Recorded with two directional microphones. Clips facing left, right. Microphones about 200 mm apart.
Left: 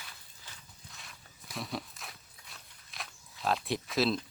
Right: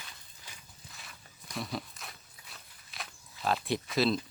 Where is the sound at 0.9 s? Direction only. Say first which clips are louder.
Right 1 dB; centre (ahead or behind).